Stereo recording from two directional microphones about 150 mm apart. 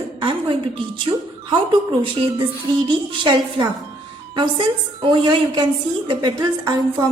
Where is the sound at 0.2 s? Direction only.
35° right (ahead or behind).